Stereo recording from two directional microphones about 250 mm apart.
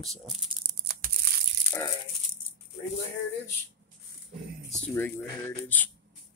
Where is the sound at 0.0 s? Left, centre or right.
Centre.